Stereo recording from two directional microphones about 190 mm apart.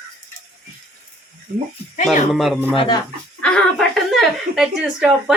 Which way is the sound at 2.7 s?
25° left (ahead or behind).